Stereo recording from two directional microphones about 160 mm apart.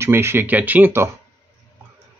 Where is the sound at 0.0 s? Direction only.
15° right (ahead or behind).